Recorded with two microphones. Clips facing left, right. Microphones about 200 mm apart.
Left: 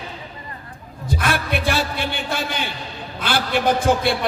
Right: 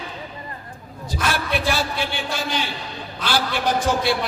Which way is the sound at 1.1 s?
55° left (ahead or behind).